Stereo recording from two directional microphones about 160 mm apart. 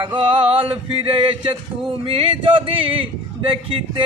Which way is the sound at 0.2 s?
35° right (ahead or behind).